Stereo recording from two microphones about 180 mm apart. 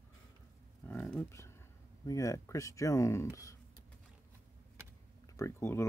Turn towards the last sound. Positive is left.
turn(degrees=15)  # may be behind; listen again after turning